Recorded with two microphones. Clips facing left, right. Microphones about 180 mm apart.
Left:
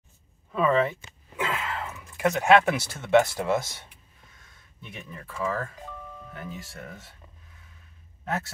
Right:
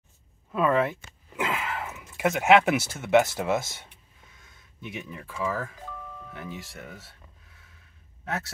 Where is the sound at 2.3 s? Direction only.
20° right (ahead or behind).